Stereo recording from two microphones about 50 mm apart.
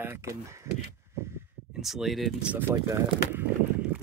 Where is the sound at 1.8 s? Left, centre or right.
Centre.